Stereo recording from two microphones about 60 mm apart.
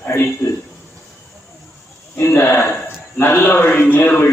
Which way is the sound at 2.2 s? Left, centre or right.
Left.